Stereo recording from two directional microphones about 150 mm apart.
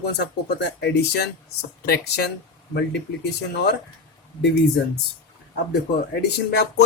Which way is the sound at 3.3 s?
90° left.